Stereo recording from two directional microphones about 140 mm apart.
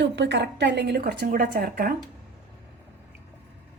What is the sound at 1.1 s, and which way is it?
Speech, 80° right.